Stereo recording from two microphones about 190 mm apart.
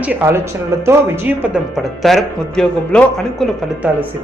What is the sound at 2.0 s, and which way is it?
Speech, centre (ahead or behind).